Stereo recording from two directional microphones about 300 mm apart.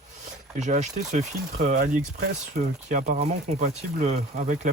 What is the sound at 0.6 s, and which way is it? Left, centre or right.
Speech, right.